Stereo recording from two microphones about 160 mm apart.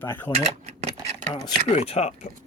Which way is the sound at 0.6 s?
40° right (ahead or behind).